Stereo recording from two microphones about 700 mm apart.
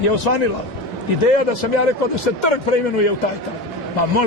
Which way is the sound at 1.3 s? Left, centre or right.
Left.